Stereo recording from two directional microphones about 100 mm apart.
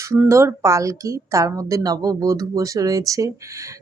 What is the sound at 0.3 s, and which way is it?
A woman's voice, 30° right (ahead or behind).